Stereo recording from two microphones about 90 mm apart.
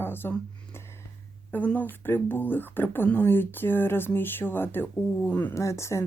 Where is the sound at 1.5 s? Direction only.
20° left (ahead or behind).